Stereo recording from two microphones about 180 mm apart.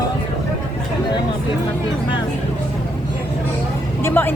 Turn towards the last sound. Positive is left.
turn(degrees=10)  # may be behind; listen again after turning